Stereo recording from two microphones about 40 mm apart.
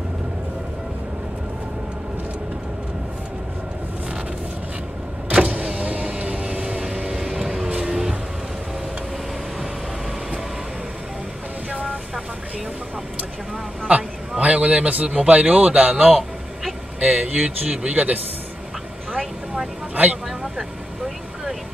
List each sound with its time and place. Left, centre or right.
5.3 s power windows: right
6.1 s vehicle: right; by 8.2 s centre
13.9 s a sound: right
15.0 s speech: right
20.2 s vehicle: centre